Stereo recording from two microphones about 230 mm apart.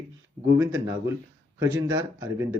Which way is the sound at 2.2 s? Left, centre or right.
Centre.